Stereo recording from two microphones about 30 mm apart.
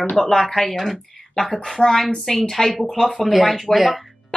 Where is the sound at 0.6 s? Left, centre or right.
Centre.